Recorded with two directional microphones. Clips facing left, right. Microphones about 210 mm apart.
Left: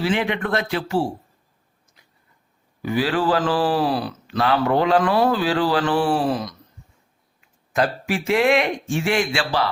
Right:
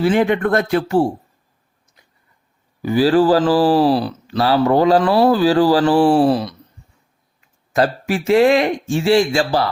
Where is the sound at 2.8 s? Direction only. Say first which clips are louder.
Right 7 dB; 35° right (ahead or behind).